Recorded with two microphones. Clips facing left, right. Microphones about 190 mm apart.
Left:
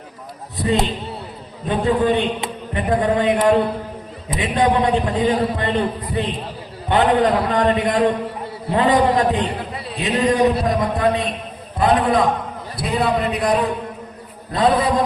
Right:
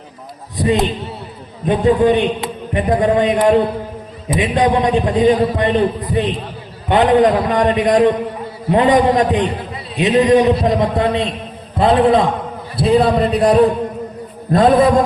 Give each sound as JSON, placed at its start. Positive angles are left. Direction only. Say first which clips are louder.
{"t": 0.5, "sound": "a man's voice", "louder": "right 4 dB", "side_deg": -15}
{"t": 4.4, "sound": "a man's voice", "louder": "right 3 dB", "side_deg": -15}
{"t": 14.5, "sound": "a man's voice", "louder": "right 6 dB", "side_deg": -50}